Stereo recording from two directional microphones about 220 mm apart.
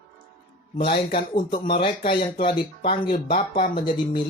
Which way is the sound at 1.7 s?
25° left (ahead or behind).